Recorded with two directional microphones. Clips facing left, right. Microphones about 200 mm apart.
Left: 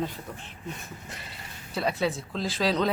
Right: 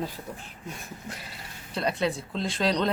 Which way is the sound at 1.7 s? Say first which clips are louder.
Even; 5° left (ahead or behind).